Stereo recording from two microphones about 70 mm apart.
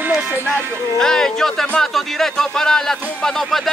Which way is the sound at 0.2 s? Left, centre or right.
Right.